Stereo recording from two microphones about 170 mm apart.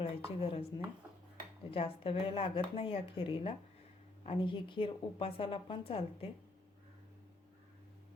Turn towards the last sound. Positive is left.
turn(degrees=35)  # may be behind; listen again after turning